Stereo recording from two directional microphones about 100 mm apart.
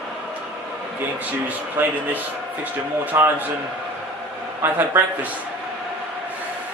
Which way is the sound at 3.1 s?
20° right (ahead or behind).